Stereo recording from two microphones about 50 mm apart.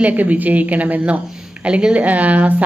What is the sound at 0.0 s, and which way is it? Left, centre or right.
Speech, right.